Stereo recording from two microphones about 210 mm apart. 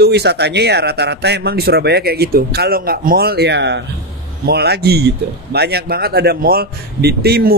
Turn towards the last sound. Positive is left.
turn(degrees=-50)  # may be behind; listen again after turning